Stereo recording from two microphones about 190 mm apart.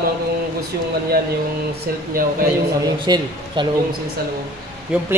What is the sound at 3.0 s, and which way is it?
Speech, 20° right (ahead or behind).